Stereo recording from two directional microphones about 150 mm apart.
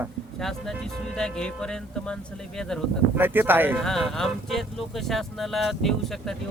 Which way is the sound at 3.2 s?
15° right (ahead or behind).